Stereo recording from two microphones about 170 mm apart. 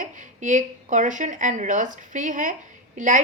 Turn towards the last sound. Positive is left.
turn(degrees=-50)  # may be behind; listen again after turning